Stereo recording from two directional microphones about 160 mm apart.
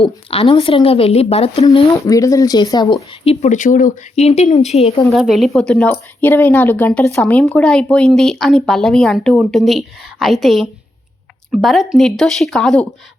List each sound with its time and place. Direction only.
0.0 s speech: 35° left (ahead or behind)
1.6 s speech: 25° left (ahead or behind)
3.2 s speech: 50° left (ahead or behind)
5.1 s speech: centre (ahead or behind)